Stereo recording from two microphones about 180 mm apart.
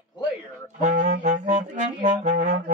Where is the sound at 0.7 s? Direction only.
45° right (ahead or behind).